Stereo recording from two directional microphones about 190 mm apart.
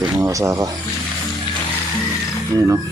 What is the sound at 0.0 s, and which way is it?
Speech, 15° right (ahead or behind).